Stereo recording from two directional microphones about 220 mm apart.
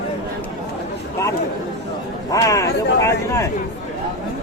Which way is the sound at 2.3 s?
15° left (ahead or behind).